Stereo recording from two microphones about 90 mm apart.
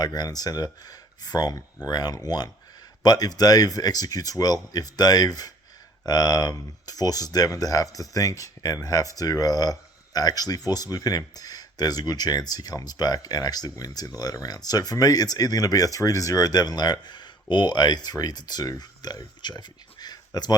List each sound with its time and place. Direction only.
0.0 s speech: 50° left (ahead or behind)